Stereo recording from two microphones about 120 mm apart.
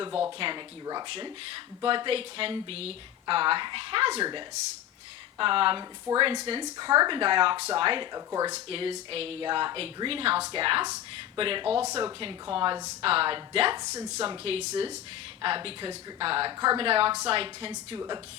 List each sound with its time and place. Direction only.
0.1 s speech: 5° right (ahead or behind)
0.3 s speech: 45° right (ahead or behind)
6.1 s speech: 20° right (ahead or behind)
6.4 s speech: 40° right (ahead or behind)
8.1 s speech: 30° right (ahead or behind)
8.5 s speech: 50° right (ahead or behind)
13.7 s speech: 30° right (ahead or behind)
14.3 s speech: 55° right (ahead or behind)
15.4 s speech: 45° right (ahead or behind)
16.5 s speech: 35° right (ahead or behind)